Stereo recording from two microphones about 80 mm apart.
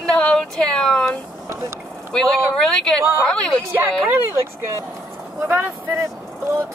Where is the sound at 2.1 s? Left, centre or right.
Centre.